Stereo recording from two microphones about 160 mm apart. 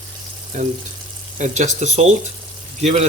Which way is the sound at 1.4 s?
50° right (ahead or behind).